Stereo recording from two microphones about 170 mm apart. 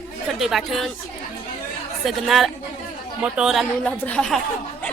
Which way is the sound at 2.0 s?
Centre (ahead or behind).